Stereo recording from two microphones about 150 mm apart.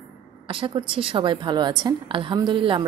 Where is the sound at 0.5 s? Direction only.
35° right (ahead or behind).